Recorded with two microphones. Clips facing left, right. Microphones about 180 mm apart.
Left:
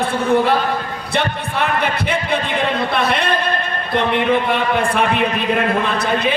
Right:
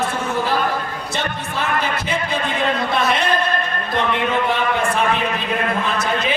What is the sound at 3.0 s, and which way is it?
Speech, 60° left (ahead or behind).